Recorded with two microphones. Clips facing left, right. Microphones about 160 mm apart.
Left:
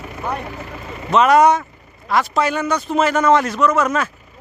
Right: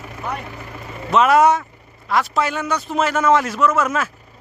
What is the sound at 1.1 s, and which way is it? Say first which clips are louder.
A man's voice: left 1 dB; centre (ahead or behind).